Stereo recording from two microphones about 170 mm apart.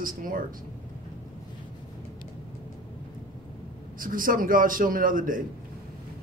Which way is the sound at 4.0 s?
55° right (ahead or behind).